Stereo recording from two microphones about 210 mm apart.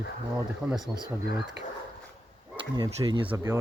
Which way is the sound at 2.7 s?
20° right (ahead or behind).